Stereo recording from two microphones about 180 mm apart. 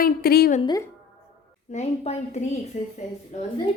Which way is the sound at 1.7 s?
40° left (ahead or behind).